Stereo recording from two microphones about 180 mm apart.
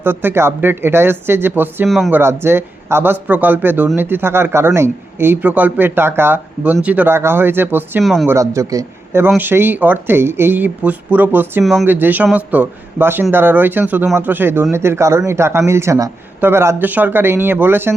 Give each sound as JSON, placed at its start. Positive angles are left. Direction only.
{"t": 0.0, "sound": "speech", "side_deg": -10}
{"t": 8.0, "sound": "speech", "side_deg": 0}
{"t": 8.3, "sound": "speech", "side_deg": -15}